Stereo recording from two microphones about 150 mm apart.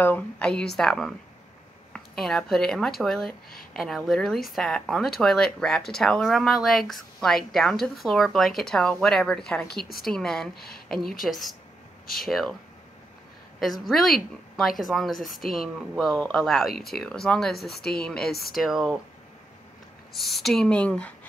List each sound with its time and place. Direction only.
0.0 s a woman's voice: 10° left (ahead or behind)
10.5 s speech: 90° left
10.9 s a woman's voice: centre (ahead or behind)
13.6 s speech: centre (ahead or behind)
20.1 s speech: centre (ahead or behind)